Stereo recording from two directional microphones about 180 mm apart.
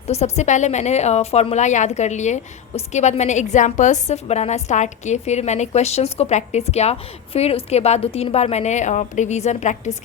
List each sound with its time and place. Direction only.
0.1 s a woman's voice: 40° left (ahead or behind)